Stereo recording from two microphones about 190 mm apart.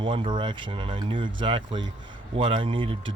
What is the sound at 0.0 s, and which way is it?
Speech, 25° right (ahead or behind).